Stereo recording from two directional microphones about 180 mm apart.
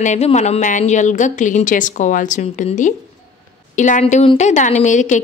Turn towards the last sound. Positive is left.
turn(degrees=45)  # may be behind; listen again after turning